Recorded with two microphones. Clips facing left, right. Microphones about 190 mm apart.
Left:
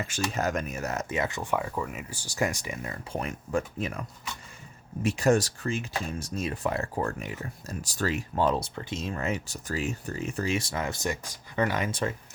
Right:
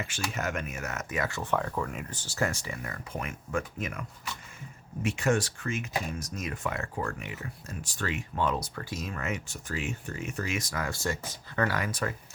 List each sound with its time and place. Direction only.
0.0 s speech: 40° left (ahead or behind)
5.0 s speech: 40° left (ahead or behind)